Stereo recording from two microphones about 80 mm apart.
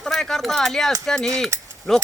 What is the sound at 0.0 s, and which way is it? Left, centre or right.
Speech, centre.